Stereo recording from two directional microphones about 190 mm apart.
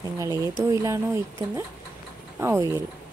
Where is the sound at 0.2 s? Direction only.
20° right (ahead or behind).